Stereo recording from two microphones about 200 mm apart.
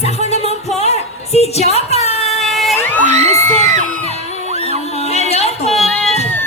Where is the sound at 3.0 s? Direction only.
35° right (ahead or behind).